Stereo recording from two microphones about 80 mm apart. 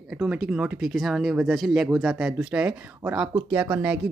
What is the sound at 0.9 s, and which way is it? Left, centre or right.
Speech, centre.